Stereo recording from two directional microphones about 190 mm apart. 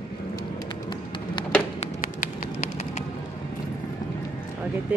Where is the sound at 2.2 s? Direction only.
40° left (ahead or behind).